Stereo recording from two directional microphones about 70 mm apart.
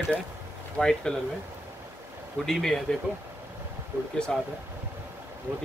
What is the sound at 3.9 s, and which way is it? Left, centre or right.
Speech, right.